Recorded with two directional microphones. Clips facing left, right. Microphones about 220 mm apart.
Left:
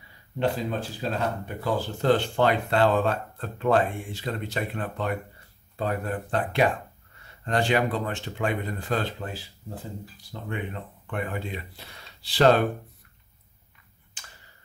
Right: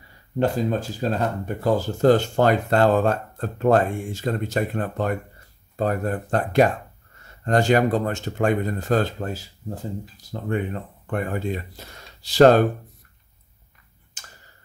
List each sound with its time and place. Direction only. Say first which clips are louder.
0.4 s speech: right 5 dB; 45° right (ahead or behind)
14.2 s tick-tock: right 2 dB; 45° right (ahead or behind)